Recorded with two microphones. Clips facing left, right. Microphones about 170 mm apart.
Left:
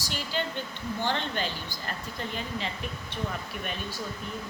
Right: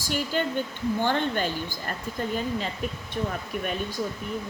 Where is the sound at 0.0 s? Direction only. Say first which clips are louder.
Right 5 dB; 50° right (ahead or behind).